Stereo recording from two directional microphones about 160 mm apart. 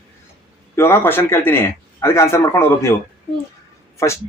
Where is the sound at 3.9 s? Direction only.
15° left (ahead or behind).